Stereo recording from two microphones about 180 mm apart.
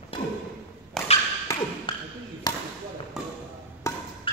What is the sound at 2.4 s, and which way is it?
Basketball bounce, 20° left (ahead or behind).